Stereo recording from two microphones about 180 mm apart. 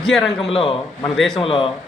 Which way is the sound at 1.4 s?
30° left (ahead or behind).